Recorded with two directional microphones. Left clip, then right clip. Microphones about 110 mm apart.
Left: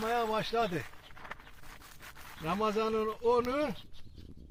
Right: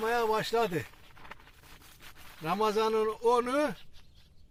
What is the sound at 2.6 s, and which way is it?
Speech, 90° right.